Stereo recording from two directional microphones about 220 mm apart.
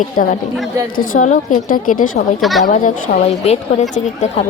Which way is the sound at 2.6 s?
35° left (ahead or behind).